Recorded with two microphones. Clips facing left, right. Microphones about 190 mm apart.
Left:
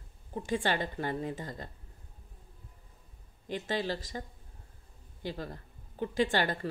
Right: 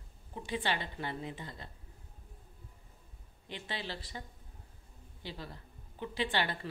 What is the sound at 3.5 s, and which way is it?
Speech, 45° left (ahead or behind).